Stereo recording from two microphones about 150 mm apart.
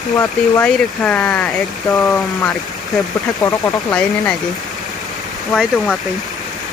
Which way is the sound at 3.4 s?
20° left (ahead or behind).